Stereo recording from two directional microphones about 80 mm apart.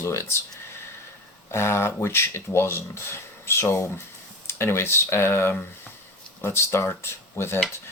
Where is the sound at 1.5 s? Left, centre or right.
Left.